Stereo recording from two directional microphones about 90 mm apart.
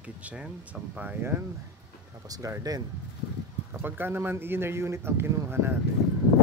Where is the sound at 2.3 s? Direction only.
40° right (ahead or behind).